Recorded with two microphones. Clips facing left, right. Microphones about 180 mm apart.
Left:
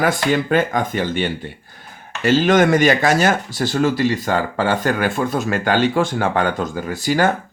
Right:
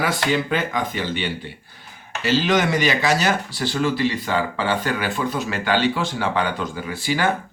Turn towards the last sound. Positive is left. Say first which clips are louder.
# left 5 dB
turn(degrees=45)  # may be behind; listen again after turning